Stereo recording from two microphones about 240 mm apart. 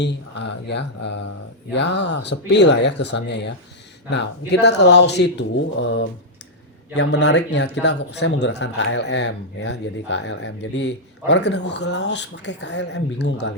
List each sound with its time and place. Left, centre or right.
0.0 s a man's voice: left
6.9 s a man's voice: left